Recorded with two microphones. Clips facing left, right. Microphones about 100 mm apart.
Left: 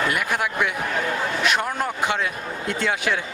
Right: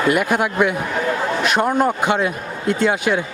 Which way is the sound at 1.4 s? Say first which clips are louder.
Right 4 dB; 40° right (ahead or behind).